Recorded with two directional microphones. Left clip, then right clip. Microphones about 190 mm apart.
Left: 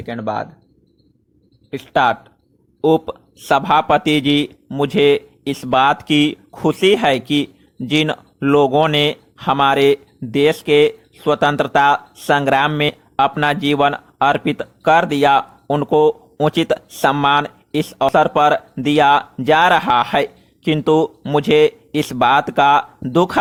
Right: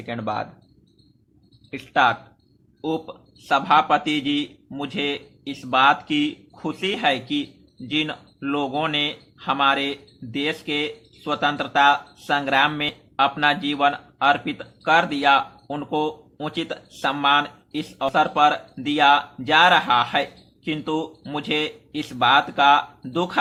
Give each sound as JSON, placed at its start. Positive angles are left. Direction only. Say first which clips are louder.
{"t": 0.0, "sound": "speech", "louder": "left 4 dB", "side_deg": 25}
{"t": 1.7, "sound": "speech", "louder": "left 4 dB", "side_deg": 35}